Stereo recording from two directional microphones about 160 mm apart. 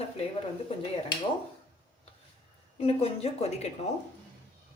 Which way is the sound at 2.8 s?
40° left (ahead or behind).